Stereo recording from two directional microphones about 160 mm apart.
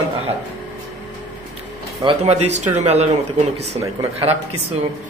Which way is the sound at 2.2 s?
45° right (ahead or behind).